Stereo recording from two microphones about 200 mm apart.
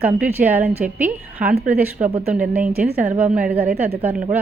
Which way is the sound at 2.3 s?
5° right (ahead or behind).